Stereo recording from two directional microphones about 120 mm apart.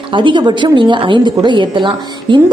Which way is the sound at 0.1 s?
40° right (ahead or behind).